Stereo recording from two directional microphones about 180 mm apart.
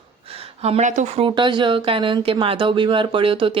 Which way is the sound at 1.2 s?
25° right (ahead or behind).